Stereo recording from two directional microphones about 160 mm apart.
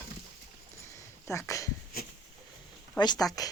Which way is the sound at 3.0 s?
25° left (ahead or behind).